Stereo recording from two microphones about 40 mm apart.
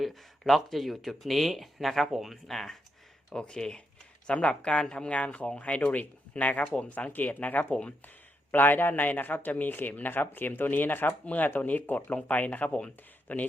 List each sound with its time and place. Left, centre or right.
0.1 s speech: centre
3.3 s speech: left
7.1 s a man's voice: left
7.7 s speech: left
8.5 s a man's voice: left
9.6 s a man's voice: left
13.2 s speech: left